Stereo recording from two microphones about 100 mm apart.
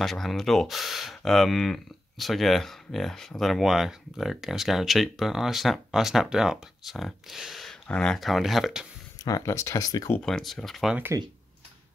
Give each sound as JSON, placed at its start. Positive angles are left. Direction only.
{"t": 0.0, "sound": "speech", "side_deg": 0}
{"t": 9.2, "sound": "speech", "side_deg": 35}
{"t": 10.2, "sound": "speech", "side_deg": 5}